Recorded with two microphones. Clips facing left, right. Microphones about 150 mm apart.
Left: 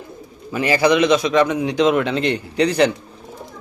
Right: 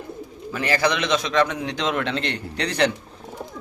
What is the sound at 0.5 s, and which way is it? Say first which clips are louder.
A man's voice: left 6 dB; 10° left (ahead or behind).